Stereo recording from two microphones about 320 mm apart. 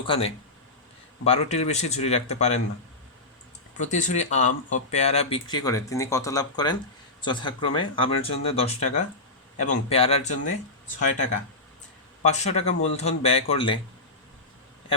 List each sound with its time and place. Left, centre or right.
0.0 s speech: centre
3.8 s speech: left